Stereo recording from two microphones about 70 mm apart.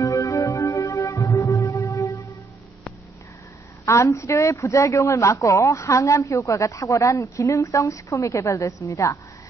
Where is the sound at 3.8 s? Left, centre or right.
Left.